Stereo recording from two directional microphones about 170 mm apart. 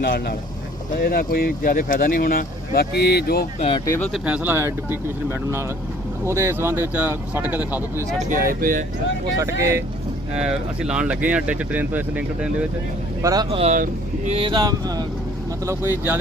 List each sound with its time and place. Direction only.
0.0 s speech: 70° left (ahead or behind)
3.8 s speech: 15° left (ahead or behind)
4.1 s speech: 10° right (ahead or behind)
8.3 s speech: 55° right (ahead or behind)
9.4 s speech: 15° right (ahead or behind)
10.3 s speech: 5° right (ahead or behind)
13.2 s speech: 25° right (ahead or behind)
13.6 s speech: 40° right (ahead or behind); by 16.1 s 10° right (ahead or behind)